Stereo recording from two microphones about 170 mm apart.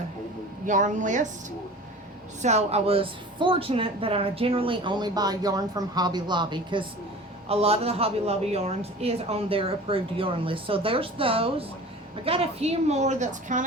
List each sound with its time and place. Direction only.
0.6 s speech: 50° right (ahead or behind)
2.4 s a woman's voice: 40° right (ahead or behind)